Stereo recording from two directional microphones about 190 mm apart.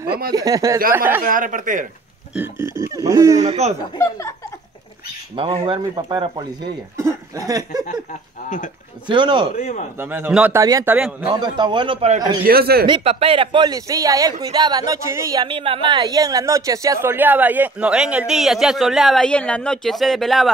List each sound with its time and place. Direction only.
0.3 s speech: 20° right (ahead or behind)
1.2 s speech: 45° right (ahead or behind)
2.3 s speech: 10° right (ahead or behind)
5.4 s speech: 30° right (ahead or behind)
9.0 s speech: 25° right (ahead or behind)
9.6 s a man's voice: 40° left (ahead or behind)
9.9 s speech: 10° right (ahead or behind); by 12.2 s 30° right (ahead or behind)
12.4 s speech: 55° right (ahead or behind)
12.8 s speech: 30° right (ahead or behind); by 20.5 s centre (ahead or behind)